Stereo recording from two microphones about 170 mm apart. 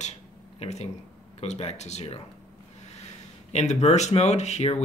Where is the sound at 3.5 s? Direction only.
40° left (ahead or behind).